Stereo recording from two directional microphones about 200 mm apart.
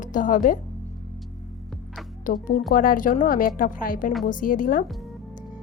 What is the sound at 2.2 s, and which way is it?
A woman's voice, 50° left (ahead or behind).